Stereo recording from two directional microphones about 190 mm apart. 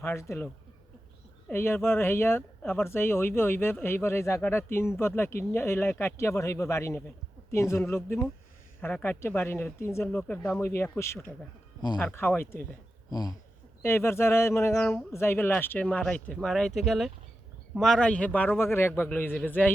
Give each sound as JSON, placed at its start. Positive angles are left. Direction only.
{"t": 0.0, "sound": "speech", "side_deg": 15}